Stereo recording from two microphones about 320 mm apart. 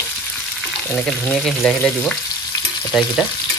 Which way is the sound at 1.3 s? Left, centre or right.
Centre.